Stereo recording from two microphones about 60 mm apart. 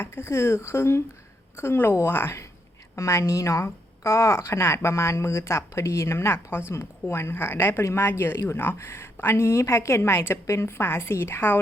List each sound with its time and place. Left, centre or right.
0.0 s a woman's voice: left
2.9 s a woman's voice: left